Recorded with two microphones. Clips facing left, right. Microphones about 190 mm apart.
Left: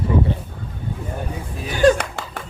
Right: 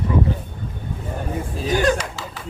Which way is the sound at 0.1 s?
30° left (ahead or behind).